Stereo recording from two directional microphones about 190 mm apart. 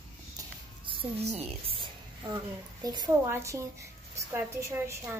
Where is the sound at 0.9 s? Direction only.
30° right (ahead or behind).